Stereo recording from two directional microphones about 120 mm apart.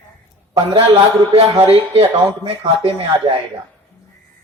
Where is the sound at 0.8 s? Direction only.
60° right (ahead or behind).